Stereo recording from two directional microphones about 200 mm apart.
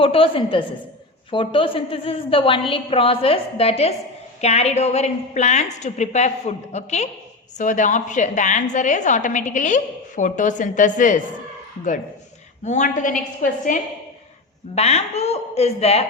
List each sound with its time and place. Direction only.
0.0 s a woman's voice: 25° left (ahead or behind)
12.6 s a woman's voice: 35° left (ahead or behind)
14.8 s a woman's voice: 30° left (ahead or behind)